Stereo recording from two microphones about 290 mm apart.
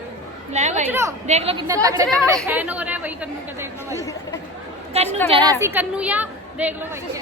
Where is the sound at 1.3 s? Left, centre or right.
Right.